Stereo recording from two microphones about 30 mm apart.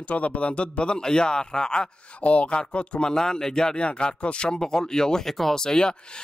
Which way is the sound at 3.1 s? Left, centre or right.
Left.